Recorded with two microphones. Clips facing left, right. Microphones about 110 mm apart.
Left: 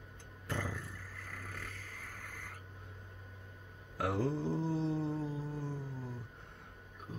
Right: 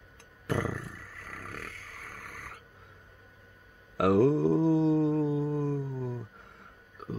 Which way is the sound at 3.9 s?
90° right.